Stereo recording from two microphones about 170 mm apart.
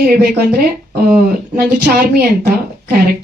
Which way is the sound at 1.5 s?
65° right (ahead or behind).